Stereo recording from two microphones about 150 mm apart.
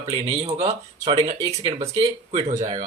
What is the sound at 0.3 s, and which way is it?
Speech, 40° right (ahead or behind).